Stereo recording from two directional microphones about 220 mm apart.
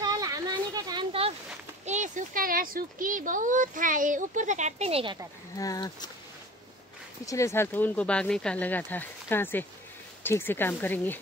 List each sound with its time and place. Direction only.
0.0 s a sound: 15° right (ahead or behind)
1.9 s speech: 35° right (ahead or behind)
5.6 s speech: 15° left (ahead or behind)
7.2 s speech: 15° left (ahead or behind)